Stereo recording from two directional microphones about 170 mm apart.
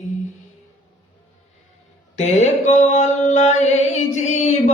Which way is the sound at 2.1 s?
40° left (ahead or behind).